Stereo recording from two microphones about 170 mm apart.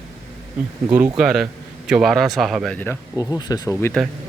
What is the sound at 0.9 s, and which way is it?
Speech, 10° right (ahead or behind).